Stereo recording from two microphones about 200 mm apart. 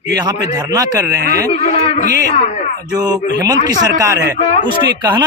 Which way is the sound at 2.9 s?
20° right (ahead or behind).